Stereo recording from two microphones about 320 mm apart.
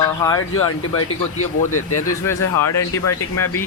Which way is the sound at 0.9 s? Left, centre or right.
Left.